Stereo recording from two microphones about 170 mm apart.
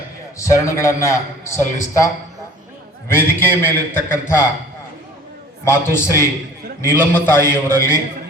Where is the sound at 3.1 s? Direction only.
15° left (ahead or behind).